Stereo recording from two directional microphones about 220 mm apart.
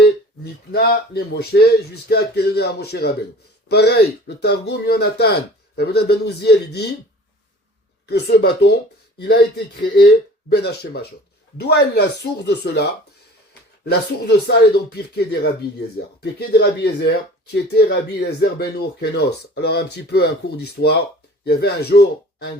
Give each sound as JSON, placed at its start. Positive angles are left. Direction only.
{"t": 0.7, "sound": "speech", "side_deg": 45}
{"t": 8.0, "sound": "a man's voice", "side_deg": 50}